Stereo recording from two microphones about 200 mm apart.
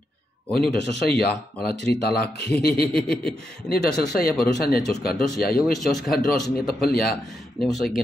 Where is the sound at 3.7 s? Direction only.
50° left (ahead or behind).